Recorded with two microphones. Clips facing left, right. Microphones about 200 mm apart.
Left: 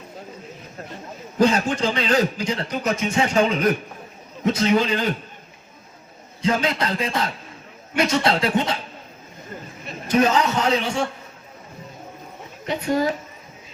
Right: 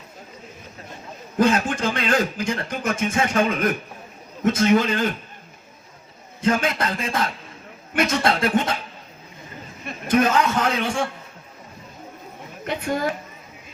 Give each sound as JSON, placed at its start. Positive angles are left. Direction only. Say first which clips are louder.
{"t": 1.4, "sound": "speech", "louder": "left 1 dB", "side_deg": -50}
{"t": 6.4, "sound": "speech", "louder": "even", "side_deg": -50}
{"t": 9.8, "sound": "a man's voice", "louder": "even", "side_deg": -50}
{"t": 12.6, "sound": "speech", "louder": "left 3 dB", "side_deg": -55}